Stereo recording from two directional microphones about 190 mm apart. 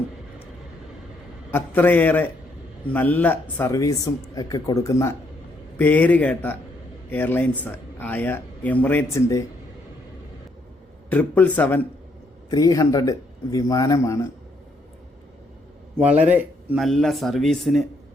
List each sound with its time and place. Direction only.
1.5 s speech: 10° left (ahead or behind)
11.1 s speech: 10° left (ahead or behind)
16.0 s speech: 5° right (ahead or behind)